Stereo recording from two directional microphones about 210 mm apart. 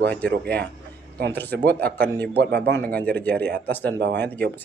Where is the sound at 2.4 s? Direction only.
55° right (ahead or behind).